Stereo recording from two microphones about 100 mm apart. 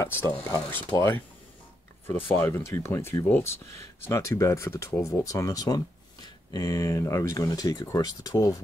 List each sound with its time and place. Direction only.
0.0 s speech: 20° left (ahead or behind)